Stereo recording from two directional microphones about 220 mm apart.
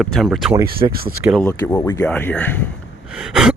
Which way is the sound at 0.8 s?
25° right (ahead or behind).